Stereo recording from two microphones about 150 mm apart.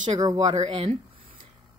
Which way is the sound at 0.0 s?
30° right (ahead or behind).